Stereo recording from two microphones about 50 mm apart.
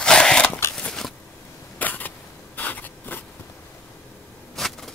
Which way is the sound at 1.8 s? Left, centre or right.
Left.